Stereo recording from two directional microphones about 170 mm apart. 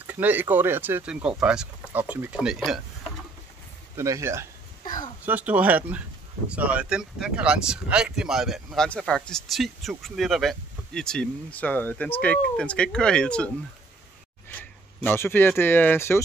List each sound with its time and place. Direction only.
0.0 s speech: 10° right (ahead or behind)
3.9 s speech: 15° right (ahead or behind); by 13.5 s 5° left (ahead or behind)
14.5 s speech: 10° left (ahead or behind)